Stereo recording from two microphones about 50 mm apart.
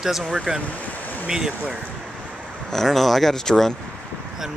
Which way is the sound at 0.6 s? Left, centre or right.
Left.